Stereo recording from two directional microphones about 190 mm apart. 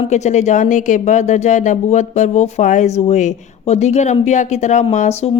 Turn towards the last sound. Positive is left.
turn(degrees=35)  # may be behind; listen again after turning